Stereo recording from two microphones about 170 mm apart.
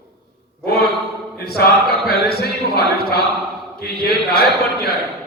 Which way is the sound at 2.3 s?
65° left (ahead or behind).